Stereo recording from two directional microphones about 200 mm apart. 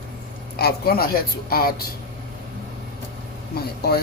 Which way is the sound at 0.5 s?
50° left (ahead or behind).